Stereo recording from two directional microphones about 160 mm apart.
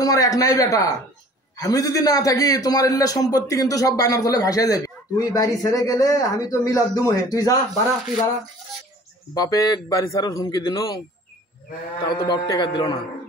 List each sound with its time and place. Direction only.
0.0 s a man's voice: 20° left (ahead or behind)
9.3 s a man's voice: 25° left (ahead or behind)
12.0 s a man's voice: 25° left (ahead or behind)